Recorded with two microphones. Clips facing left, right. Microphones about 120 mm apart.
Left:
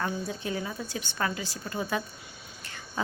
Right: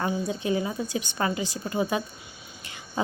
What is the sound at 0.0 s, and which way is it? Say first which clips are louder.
A woman's voice: right 4 dB; 20° right (ahead or behind).